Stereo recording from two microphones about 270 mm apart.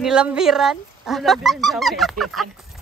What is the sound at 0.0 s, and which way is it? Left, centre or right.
Speech, centre.